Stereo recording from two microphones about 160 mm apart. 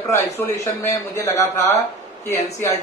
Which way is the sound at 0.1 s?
20° left (ahead or behind).